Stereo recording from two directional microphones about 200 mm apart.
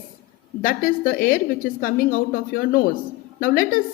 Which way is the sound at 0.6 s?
45° left (ahead or behind).